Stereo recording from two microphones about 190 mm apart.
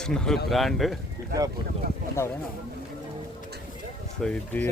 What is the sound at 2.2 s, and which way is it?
Speech, 10° left (ahead or behind).